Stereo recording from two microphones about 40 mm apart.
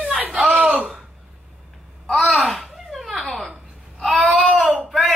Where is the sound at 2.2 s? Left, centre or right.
Centre.